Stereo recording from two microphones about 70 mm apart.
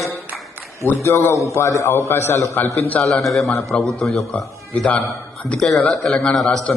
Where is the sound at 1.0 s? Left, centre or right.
Left.